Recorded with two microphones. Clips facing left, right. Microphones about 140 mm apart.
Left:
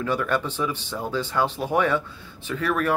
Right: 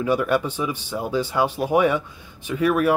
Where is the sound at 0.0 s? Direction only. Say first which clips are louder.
Right 4 dB; 15° right (ahead or behind).